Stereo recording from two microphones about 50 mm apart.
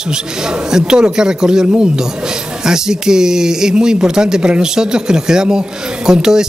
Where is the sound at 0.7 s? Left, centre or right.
Centre.